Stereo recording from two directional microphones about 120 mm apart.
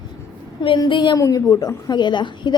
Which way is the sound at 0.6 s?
40° left (ahead or behind).